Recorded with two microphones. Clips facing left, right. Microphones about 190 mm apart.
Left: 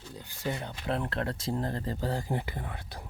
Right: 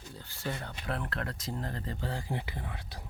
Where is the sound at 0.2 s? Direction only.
15° left (ahead or behind); by 3.0 s 50° left (ahead or behind).